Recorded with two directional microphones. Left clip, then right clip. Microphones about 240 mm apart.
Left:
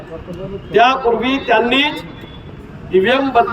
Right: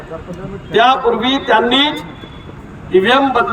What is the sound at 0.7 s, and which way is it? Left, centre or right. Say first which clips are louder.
Speech: right 1 dB; centre.